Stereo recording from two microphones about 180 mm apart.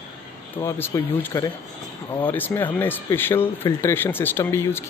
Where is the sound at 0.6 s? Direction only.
15° left (ahead or behind).